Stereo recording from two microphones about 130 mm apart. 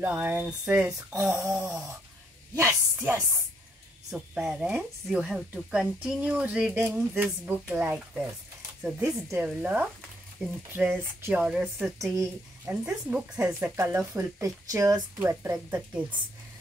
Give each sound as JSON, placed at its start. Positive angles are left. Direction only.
{"t": 0.0, "sound": "speech", "side_deg": -10}
{"t": 4.1, "sound": "speech", "side_deg": -5}
{"t": 9.4, "sound": "speech", "side_deg": -10}
{"t": 12.0, "sound": "speech", "side_deg": -20}